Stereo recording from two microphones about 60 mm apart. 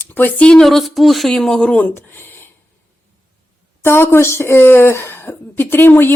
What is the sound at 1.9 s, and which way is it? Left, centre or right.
Speech, left.